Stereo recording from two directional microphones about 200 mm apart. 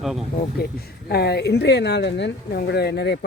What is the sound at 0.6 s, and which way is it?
A woman's voice, 55° left (ahead or behind).